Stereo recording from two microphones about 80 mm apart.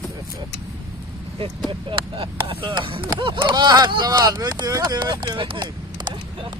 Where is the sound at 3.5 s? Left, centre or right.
Right.